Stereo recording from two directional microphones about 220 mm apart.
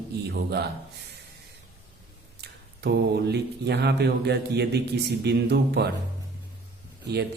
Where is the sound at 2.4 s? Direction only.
50° right (ahead or behind).